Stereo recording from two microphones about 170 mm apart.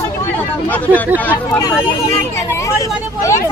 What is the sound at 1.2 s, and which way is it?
A woman's voice, 10° left (ahead or behind).